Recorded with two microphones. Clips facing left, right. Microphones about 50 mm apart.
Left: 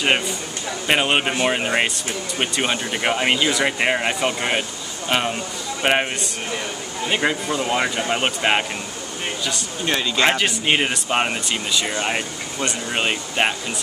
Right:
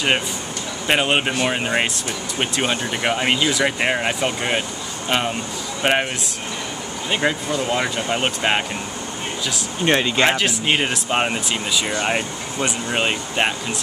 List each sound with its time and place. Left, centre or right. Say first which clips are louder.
0.8 s speech: even; centre
9.8 s speech: right 4 dB; right
10.2 s speech: even; centre